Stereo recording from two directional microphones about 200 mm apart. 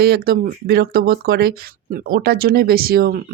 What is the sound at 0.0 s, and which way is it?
Speech, 50° right (ahead or behind).